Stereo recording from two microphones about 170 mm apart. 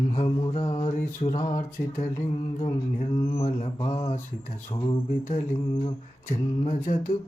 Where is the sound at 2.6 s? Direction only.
35° left (ahead or behind).